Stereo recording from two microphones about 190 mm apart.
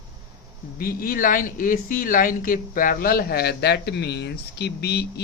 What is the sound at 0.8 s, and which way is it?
Speech, 50° left (ahead or behind).